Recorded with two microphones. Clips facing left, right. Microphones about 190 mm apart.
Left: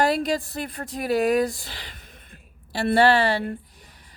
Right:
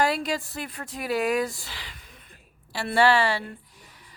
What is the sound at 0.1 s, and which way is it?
Speech, 35° left (ahead or behind).